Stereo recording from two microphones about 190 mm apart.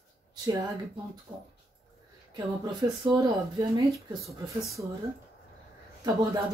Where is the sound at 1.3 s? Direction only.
25° right (ahead or behind).